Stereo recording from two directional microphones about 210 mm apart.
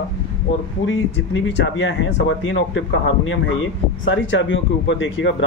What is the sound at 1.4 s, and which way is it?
Speech, 60° left (ahead or behind).